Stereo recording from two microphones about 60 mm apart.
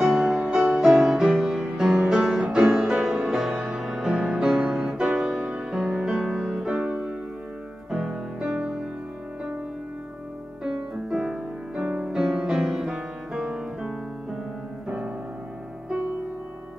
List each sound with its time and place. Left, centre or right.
0.0 s music: centre
7.9 s music: centre
10.6 s music: centre